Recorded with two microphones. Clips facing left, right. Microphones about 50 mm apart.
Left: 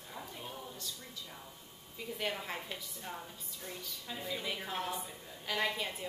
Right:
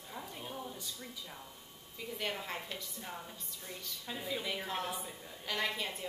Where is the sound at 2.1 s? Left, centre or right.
Centre.